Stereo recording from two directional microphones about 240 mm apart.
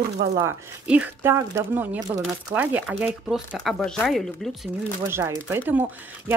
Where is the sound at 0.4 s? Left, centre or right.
Centre.